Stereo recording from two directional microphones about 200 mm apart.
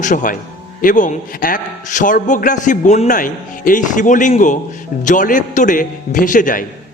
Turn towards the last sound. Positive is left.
turn(degrees=40)  # may be behind; listen again after turning